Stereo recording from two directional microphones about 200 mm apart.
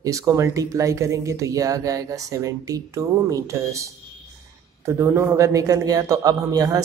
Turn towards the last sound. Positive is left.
turn(degrees=-20)  # may be behind; listen again after turning